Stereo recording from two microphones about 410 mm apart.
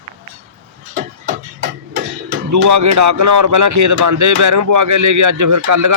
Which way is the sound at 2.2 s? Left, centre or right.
Right.